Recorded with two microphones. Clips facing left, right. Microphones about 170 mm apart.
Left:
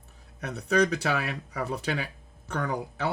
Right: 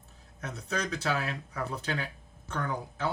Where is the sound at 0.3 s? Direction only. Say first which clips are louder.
Left 10 dB; 65° left (ahead or behind).